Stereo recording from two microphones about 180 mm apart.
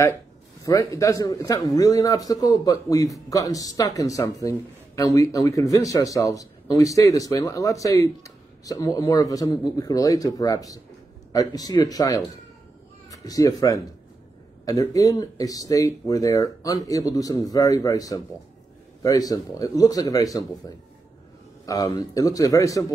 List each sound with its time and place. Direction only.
0.7 s a man's voice: 20° left (ahead or behind)